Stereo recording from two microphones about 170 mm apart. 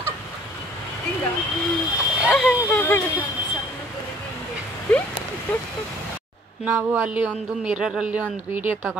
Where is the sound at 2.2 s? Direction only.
5° left (ahead or behind).